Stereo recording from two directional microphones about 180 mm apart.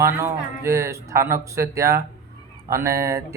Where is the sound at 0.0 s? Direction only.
15° right (ahead or behind).